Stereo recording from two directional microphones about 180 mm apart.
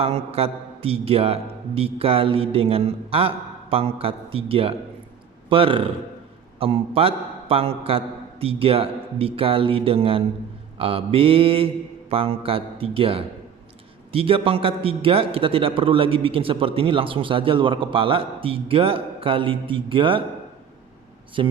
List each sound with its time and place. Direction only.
0.0 s a man's voice: 35° right (ahead or behind)
21.4 s a man's voice: 25° right (ahead or behind)